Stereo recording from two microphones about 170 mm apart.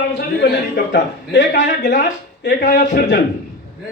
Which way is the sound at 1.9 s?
65° left (ahead or behind).